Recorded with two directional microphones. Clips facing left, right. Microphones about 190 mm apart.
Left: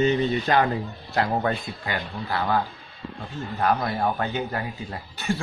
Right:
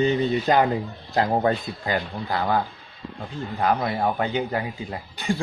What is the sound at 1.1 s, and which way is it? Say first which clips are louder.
A man's voice: right 3 dB; 25° right (ahead or behind).